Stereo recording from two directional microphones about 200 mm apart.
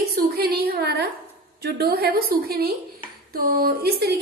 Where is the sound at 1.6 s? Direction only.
50° right (ahead or behind).